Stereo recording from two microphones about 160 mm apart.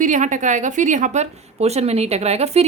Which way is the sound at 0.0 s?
50° right (ahead or behind).